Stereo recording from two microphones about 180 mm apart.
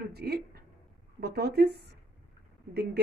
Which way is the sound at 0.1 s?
60° right (ahead or behind).